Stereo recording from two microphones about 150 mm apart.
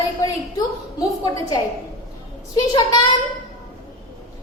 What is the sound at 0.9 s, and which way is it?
Speech, 25° left (ahead or behind).